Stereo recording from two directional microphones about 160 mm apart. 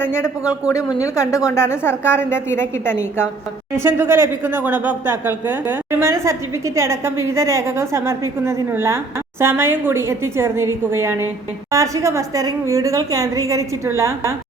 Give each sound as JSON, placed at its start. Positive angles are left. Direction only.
{"t": 0.0, "sound": "a woman's voice", "side_deg": 15}
{"t": 3.8, "sound": "a woman's voice", "side_deg": -15}